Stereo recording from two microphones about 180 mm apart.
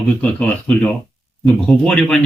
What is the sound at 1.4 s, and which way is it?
Speech, centre (ahead or behind).